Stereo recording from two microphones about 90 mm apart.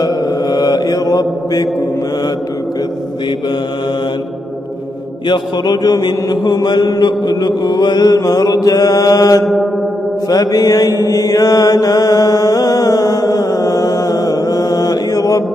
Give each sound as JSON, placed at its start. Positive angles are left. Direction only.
{"t": 0.0, "sound": "mantra", "side_deg": 45}
{"t": 5.3, "sound": "mantra", "side_deg": 50}